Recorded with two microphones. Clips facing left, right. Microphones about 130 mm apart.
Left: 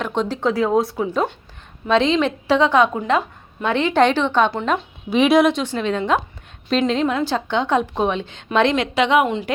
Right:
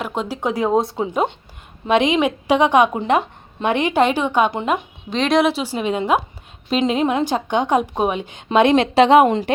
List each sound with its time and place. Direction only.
0.0 s a woman's voice: 5° right (ahead or behind)
0.3 s a woman's voice: 15° right (ahead or behind)
5.1 s a woman's voice: 5° left (ahead or behind); by 8.4 s 15° right (ahead or behind)
8.7 s speech: 35° right (ahead or behind)